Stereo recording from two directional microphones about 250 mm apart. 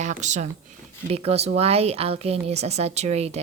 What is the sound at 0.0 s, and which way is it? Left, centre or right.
Speech, right.